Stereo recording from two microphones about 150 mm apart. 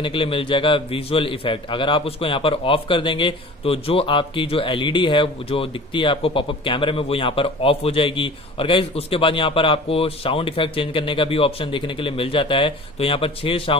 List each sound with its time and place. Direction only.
0.0 s a man's voice: 35° left (ahead or behind)